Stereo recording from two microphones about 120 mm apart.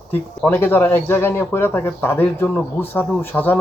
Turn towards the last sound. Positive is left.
turn(degrees=15)  # may be behind; listen again after turning